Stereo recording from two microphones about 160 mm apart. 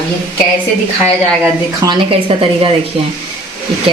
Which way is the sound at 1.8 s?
35° right (ahead or behind).